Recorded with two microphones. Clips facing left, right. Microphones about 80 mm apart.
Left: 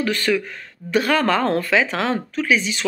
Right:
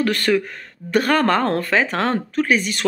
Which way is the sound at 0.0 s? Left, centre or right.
Right.